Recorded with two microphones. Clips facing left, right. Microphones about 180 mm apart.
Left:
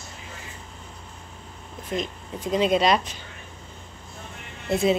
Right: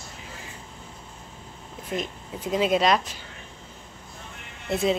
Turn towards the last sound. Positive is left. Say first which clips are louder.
# left 2 dB
turn(degrees=0)  # may be behind; listen again after turning